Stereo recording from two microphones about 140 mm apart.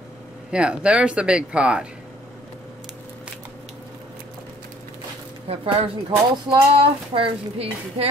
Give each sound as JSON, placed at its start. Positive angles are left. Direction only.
{"t": 0.5, "sound": "speech", "side_deg": -10}
{"t": 5.5, "sound": "speech", "side_deg": -40}